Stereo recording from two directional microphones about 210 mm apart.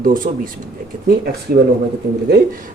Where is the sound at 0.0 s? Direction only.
40° right (ahead or behind).